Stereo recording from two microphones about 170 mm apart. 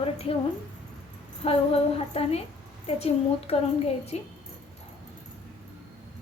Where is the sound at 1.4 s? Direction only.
35° left (ahead or behind).